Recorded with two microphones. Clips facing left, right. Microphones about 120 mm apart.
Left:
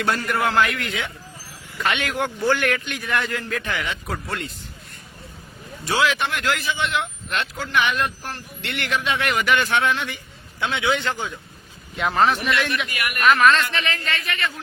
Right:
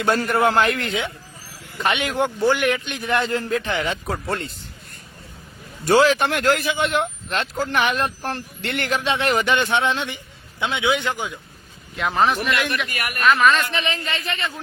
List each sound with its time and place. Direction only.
0.2 s speech: 30° right (ahead or behind)
1.8 s speech: 20° right (ahead or behind)
5.8 s a man's voice: 45° right (ahead or behind); by 11.3 s 15° right (ahead or behind)
11.9 s speech: centre (ahead or behind)
12.4 s speech: 45° right (ahead or behind)
13.2 s speech: centre (ahead or behind)
13.6 s speech: 20° right (ahead or behind)